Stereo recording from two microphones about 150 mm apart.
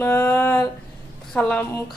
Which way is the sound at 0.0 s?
15° left (ahead or behind).